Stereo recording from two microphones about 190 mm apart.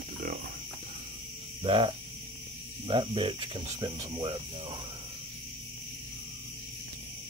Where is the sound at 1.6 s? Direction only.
30° right (ahead or behind).